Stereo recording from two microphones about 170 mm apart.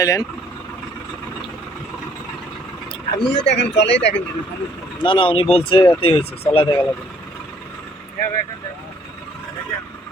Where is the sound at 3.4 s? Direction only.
90° left.